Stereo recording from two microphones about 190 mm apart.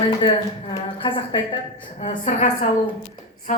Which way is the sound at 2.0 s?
40° left (ahead or behind).